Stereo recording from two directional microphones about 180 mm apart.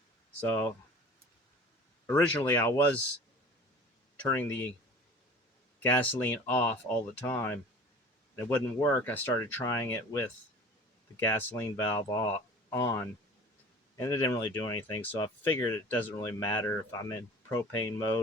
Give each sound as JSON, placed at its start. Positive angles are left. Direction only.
{"t": 0.3, "sound": "speech", "side_deg": 10}
{"t": 2.0, "sound": "speech", "side_deg": 15}
{"t": 4.3, "sound": "speech", "side_deg": 10}
{"t": 5.8, "sound": "speech", "side_deg": 10}
{"t": 11.3, "sound": "speech", "side_deg": 15}